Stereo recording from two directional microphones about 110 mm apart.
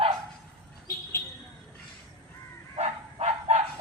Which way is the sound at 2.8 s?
80° right.